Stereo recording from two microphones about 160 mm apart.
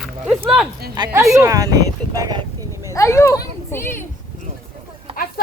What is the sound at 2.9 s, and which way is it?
Speech, 20° left (ahead or behind).